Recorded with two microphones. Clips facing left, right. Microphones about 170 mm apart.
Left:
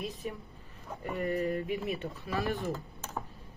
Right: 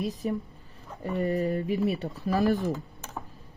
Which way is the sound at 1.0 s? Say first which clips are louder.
Right 4 dB; 35° right (ahead or behind).